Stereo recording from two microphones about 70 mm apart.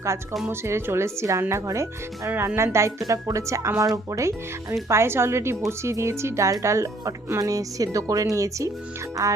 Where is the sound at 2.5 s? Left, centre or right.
Right.